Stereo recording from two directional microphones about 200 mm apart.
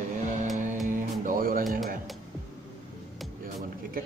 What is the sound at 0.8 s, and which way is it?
Music, 40° right (ahead or behind).